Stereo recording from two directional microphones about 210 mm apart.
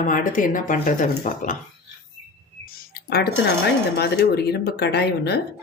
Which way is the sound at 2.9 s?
50° left (ahead or behind).